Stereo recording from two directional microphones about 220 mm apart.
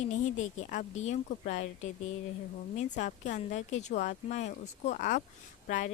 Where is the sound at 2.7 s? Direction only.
35° left (ahead or behind).